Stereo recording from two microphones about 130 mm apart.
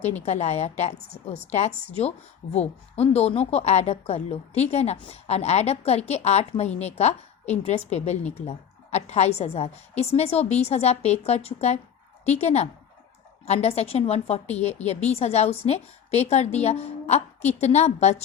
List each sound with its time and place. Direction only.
0.3 s a woman's voice: 60° left (ahead or behind)